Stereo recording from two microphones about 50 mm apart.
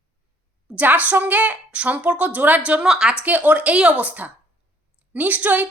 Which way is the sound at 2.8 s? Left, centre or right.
Centre.